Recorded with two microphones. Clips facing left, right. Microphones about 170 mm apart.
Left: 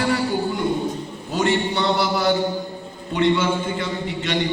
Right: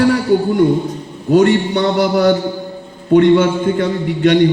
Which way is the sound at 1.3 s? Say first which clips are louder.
Right 10 dB; 55° right (ahead or behind).